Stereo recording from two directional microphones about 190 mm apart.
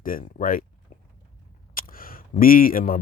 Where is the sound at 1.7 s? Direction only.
50° left (ahead or behind).